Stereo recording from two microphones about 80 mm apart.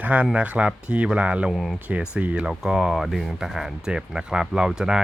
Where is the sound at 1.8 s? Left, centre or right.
Centre.